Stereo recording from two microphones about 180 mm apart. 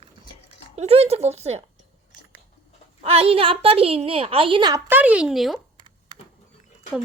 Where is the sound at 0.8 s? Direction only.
35° right (ahead or behind).